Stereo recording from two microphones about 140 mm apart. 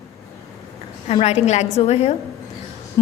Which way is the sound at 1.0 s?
50° left (ahead or behind).